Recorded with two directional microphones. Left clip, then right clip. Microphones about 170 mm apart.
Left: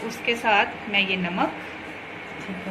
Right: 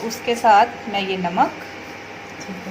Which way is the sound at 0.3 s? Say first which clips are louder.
Right 7 dB; 50° right (ahead or behind).